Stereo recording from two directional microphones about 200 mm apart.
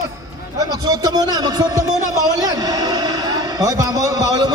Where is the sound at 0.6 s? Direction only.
20° right (ahead or behind).